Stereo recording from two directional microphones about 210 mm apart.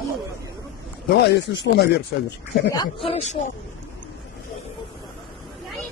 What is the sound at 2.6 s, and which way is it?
Speech, 15° left (ahead or behind).